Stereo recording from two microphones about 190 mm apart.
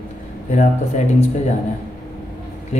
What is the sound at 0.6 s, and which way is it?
Speech, 40° left (ahead or behind).